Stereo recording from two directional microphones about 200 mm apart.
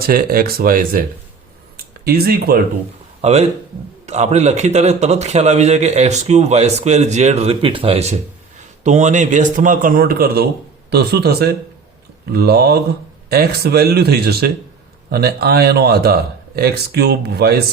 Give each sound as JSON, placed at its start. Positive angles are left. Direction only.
{"t": 0.0, "sound": "speech", "side_deg": -50}
{"t": 1.7, "sound": "a sound", "side_deg": -50}
{"t": 3.2, "sound": "a man's voice", "side_deg": -35}